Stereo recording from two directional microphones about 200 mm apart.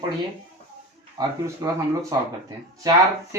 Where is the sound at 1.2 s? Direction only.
20° right (ahead or behind).